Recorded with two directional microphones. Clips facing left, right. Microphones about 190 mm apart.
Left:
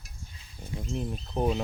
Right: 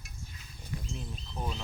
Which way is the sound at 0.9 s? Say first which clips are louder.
Left 10 dB; 55° left (ahead or behind).